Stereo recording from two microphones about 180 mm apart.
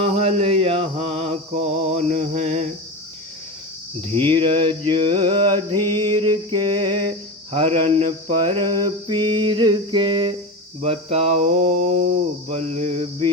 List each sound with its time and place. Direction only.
0.0 s mantra: 30° right (ahead or behind)
4.1 s mantra: 30° right (ahead or behind)